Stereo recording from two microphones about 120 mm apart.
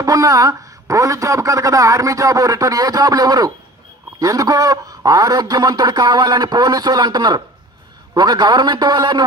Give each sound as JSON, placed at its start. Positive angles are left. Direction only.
{"t": 0.0, "sound": "a man's voice", "side_deg": -30}